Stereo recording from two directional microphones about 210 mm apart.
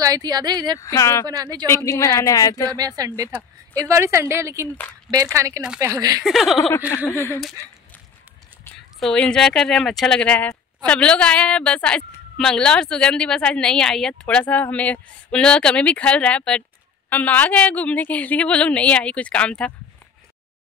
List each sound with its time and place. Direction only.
0.0 s speech: 15° right (ahead or behind)
0.7 s a woman's voice: 15° left (ahead or behind)
1.2 s speech: 20° right (ahead or behind)
1.9 s a woman's voice: 15° left (ahead or behind)
2.7 s a woman's voice: 15° right (ahead or behind)
6.2 s a woman's voice: centre (ahead or behind)
7.1 s a woman's voice: 15° left (ahead or behind)
9.0 s a woman's voice: 5° left (ahead or behind)